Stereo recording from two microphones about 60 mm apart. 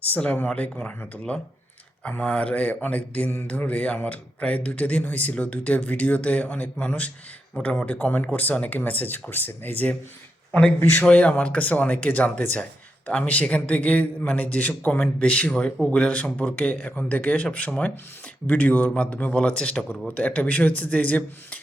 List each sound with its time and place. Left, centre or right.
0.1 s speech: left
7.9 s speech: left